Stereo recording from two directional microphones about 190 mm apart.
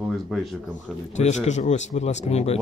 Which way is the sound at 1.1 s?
35° left (ahead or behind).